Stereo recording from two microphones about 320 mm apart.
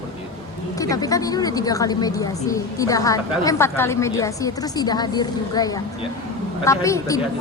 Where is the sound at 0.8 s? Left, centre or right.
Centre.